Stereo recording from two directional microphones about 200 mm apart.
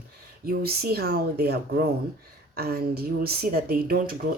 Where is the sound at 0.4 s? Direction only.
50° right (ahead or behind).